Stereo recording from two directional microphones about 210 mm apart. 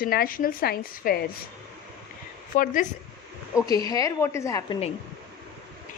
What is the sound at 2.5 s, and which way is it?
Speech, 40° left (ahead or behind).